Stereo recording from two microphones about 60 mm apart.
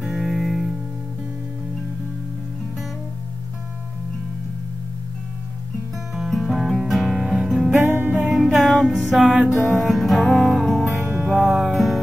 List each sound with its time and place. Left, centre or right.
0.0 s music: centre
6.1 s music: centre
7.9 s music: right
8.3 s music: centre
8.5 s music: centre
11.1 s music: centre